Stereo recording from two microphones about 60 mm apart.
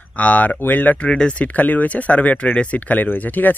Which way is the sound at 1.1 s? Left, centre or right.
Centre.